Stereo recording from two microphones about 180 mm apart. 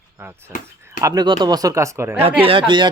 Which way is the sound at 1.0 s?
20° right (ahead or behind).